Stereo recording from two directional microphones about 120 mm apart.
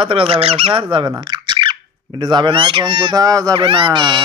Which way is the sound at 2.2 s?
40° right (ahead or behind).